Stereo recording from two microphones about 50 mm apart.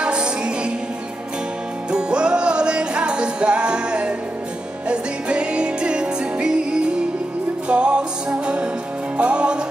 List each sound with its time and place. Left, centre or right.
0.0 s music: centre
1.9 s music: centre